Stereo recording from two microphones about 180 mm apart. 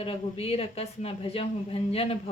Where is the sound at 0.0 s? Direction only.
30° left (ahead or behind).